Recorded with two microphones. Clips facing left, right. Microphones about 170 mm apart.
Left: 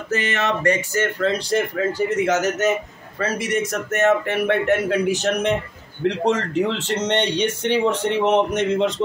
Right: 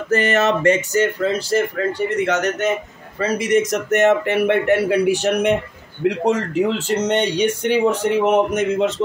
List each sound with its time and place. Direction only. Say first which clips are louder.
0.1 s a sound: right 6 dB; 45° right (ahead or behind)
0.7 s speech: right 4 dB; 20° right (ahead or behind)
1.2 s speech: right 2 dB; 5° right (ahead or behind)
3.2 s speech: right 5 dB; 15° right (ahead or behind)